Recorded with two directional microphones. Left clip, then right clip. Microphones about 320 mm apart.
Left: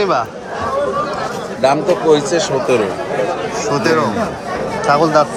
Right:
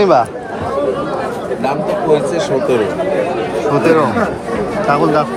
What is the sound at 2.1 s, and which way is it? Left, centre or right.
Speech, left.